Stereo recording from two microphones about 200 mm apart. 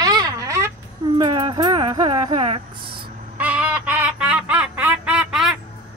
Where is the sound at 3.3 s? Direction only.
5° right (ahead or behind).